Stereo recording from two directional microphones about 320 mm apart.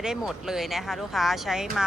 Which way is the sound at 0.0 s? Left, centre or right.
Centre.